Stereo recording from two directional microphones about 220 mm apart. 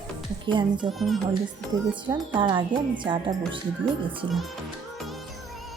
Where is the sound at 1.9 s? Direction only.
15° right (ahead or behind).